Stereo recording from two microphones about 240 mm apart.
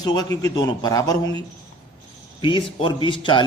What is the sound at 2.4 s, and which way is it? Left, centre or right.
A man's voice, left.